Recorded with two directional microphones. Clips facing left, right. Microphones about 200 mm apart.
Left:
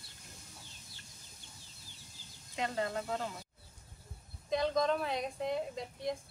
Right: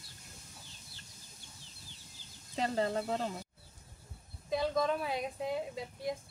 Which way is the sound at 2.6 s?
35° right (ahead or behind).